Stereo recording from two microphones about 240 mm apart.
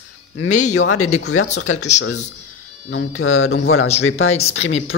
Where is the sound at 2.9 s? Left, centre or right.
Left.